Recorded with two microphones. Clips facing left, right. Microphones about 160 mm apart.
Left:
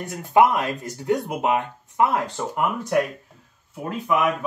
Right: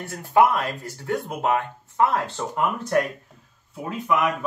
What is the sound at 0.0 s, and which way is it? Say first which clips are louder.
Speech: left 1 dB; 15° left (ahead or behind).